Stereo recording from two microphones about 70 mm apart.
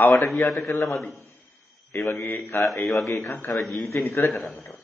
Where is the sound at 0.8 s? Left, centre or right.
Centre.